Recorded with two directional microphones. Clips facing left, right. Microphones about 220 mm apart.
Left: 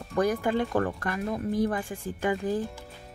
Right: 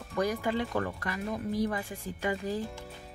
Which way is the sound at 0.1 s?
50° left (ahead or behind).